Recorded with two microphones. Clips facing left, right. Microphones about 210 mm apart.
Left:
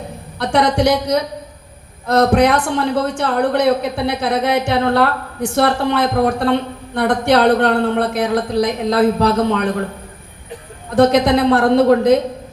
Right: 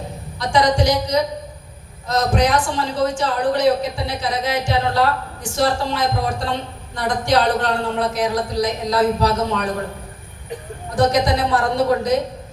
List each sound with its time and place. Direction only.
0.3 s a man's voice: 60° left (ahead or behind)
10.9 s a man's voice: 60° left (ahead or behind)